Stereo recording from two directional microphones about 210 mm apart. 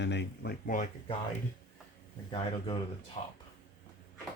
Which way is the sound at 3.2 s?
30° left (ahead or behind).